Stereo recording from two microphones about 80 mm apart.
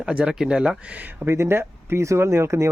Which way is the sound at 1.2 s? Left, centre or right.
Right.